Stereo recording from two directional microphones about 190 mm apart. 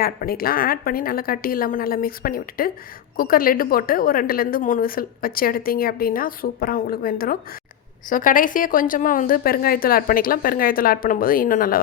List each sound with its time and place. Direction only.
0.0 s a woman's voice: 50° left (ahead or behind)